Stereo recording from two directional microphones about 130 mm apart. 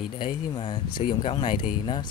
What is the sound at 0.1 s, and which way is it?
Speech, 35° left (ahead or behind).